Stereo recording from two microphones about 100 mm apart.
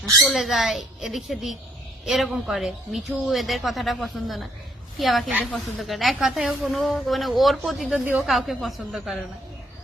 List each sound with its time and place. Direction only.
0.0 s speech: 35° right (ahead or behind)
0.3 s speech: centre (ahead or behind)